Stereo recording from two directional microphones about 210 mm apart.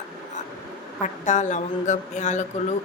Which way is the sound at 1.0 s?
35° left (ahead or behind).